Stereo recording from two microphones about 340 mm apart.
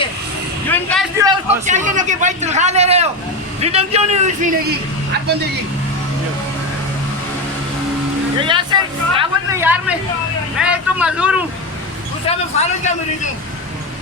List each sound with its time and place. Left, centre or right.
0.7 s vehicle: centre
1.2 s a man's voice: centre
8.4 s speech: centre
12.2 s speech: centre